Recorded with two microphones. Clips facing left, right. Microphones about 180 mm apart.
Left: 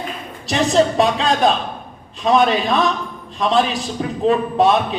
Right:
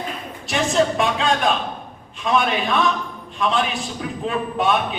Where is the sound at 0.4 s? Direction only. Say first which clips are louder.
Left 4 dB; 35° left (ahead or behind).